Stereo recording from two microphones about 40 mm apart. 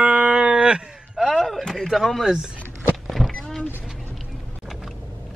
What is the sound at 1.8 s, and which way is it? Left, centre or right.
Speech, centre.